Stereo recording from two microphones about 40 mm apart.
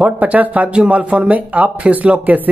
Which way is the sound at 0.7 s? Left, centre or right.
Right.